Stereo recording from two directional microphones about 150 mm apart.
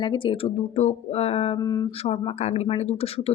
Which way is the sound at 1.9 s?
35° left (ahead or behind).